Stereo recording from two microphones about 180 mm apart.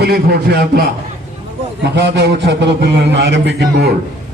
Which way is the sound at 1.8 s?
70° right (ahead or behind).